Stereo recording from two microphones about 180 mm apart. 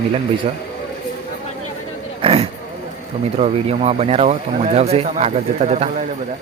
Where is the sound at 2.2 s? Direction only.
35° right (ahead or behind).